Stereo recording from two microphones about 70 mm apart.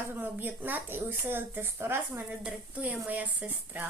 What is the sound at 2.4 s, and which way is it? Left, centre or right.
A woman's voice, right.